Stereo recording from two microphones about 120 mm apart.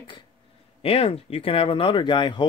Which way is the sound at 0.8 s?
55° left (ahead or behind).